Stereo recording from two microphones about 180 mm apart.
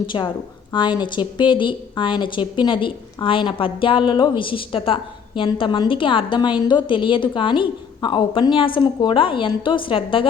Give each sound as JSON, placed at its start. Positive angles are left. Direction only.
{"t": 0.1, "sound": "a woman's voice", "side_deg": 25}